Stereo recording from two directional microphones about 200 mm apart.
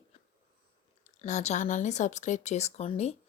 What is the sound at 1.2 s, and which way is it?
Speech, 35° left (ahead or behind).